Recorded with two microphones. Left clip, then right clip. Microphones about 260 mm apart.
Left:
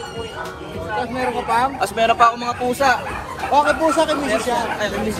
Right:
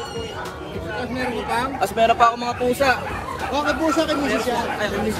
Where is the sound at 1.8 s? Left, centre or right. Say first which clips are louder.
Right 2 dB; left.